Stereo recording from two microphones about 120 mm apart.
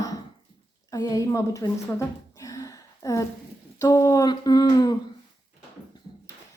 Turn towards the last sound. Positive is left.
turn(degrees=35)  # may be behind; listen again after turning